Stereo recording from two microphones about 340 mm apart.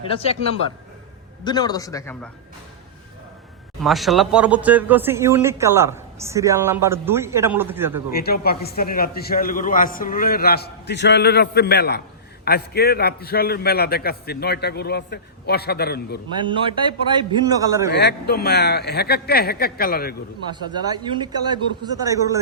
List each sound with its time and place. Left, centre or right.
1.5 s a man's voice: centre
3.8 s speech: centre
8.1 s a man's voice: left
16.5 s speech: centre
17.9 s a man's voice: left
20.5 s speech: centre